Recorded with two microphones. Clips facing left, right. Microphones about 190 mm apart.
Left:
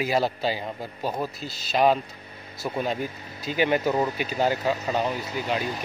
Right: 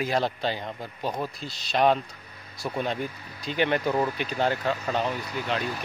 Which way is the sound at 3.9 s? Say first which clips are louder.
Left 1 dB; 20° left (ahead or behind).